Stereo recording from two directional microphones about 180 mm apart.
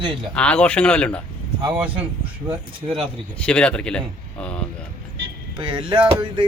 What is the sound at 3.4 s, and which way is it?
A man's voice, 5° left (ahead or behind).